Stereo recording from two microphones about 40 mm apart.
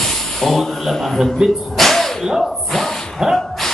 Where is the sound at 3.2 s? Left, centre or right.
Centre.